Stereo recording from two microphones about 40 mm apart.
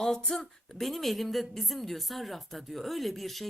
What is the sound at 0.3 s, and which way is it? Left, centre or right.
A woman's voice, centre.